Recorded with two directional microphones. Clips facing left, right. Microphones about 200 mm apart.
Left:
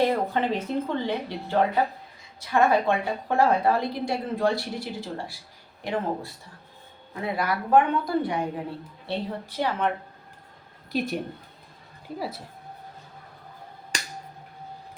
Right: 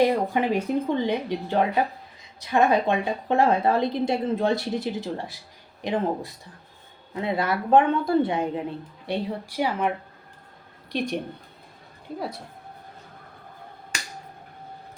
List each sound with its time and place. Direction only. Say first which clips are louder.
0.0 s a woman's voice: right 2 dB; 15° right (ahead or behind)
9.0 s speech: right 2 dB; 10° right (ahead or behind)
10.9 s a woman's voice: even; 5° left (ahead or behind)